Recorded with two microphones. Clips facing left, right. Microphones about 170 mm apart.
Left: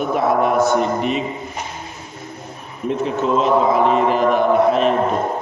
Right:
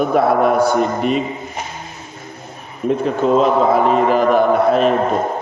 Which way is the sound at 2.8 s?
35° right (ahead or behind).